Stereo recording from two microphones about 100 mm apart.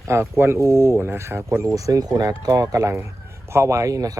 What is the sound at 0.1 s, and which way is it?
Speech, 25° right (ahead or behind).